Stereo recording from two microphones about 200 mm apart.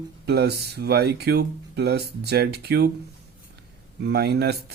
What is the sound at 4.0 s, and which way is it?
Speech, 55° right (ahead or behind).